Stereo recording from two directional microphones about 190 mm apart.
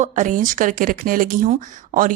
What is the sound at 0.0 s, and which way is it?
Speech, 40° right (ahead or behind).